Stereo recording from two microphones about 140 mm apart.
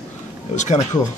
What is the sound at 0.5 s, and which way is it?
Speech, 55° left (ahead or behind).